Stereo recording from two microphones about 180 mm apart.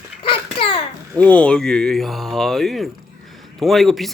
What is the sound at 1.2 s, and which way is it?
Speech, 5° left (ahead or behind).